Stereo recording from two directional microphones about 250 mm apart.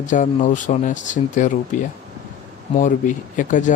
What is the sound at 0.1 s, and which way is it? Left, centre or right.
Speech, left.